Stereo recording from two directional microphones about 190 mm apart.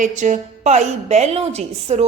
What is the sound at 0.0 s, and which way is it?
A woman's voice, 40° right (ahead or behind).